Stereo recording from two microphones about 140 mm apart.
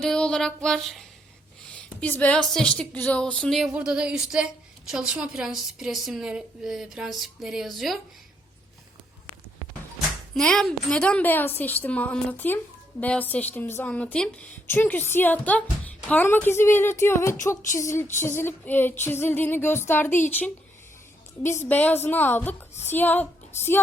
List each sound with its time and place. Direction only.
0.0 s a woman's voice: 5° left (ahead or behind)
3.6 s a woman's voice: 5° right (ahead or behind)
10.3 s speech: 5° left (ahead or behind)
21.4 s speech: 15° left (ahead or behind)